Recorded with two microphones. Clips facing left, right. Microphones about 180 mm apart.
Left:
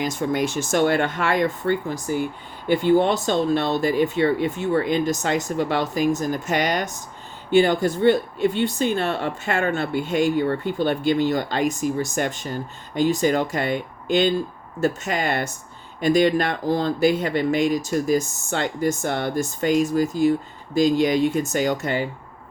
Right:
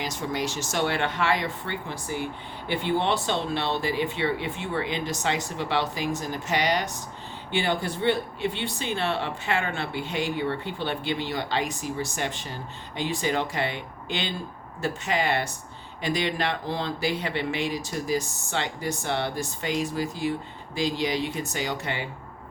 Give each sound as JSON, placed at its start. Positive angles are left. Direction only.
{"t": 0.0, "sound": "speech", "side_deg": 50}